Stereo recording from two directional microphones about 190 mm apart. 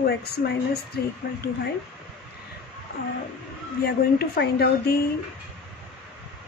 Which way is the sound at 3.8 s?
55° left (ahead or behind).